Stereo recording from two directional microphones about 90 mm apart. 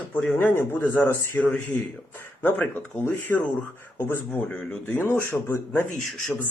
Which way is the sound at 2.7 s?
20° left (ahead or behind).